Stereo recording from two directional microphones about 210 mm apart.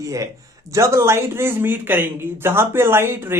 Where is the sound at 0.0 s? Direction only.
15° right (ahead or behind).